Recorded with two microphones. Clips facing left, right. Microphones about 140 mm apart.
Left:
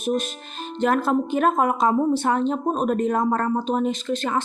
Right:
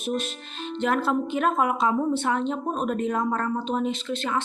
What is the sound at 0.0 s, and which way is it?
Music, 45° left (ahead or behind).